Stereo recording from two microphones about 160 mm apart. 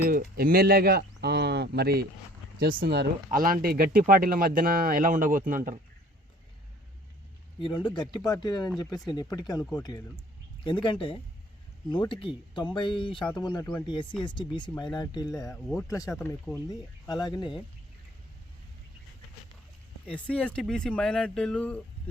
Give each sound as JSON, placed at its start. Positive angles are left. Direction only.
{"t": 0.0, "sound": "speech", "side_deg": -70}
{"t": 2.6, "sound": "speech", "side_deg": -70}
{"t": 3.2, "sound": "speech", "side_deg": -60}
{"t": 7.6, "sound": "speech", "side_deg": 30}
{"t": 20.1, "sound": "speech", "side_deg": 5}